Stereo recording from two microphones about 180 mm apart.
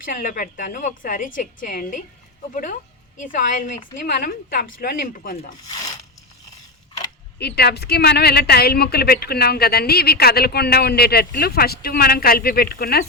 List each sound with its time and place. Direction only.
0.0 s a woman's voice: 50° left (ahead or behind)
3.2 s a woman's voice: 45° left (ahead or behind)
5.6 s speech: 20° left (ahead or behind)
7.3 s speech: 65° left (ahead or behind)